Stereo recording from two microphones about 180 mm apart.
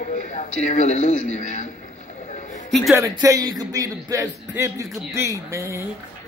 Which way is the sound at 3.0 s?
20° right (ahead or behind).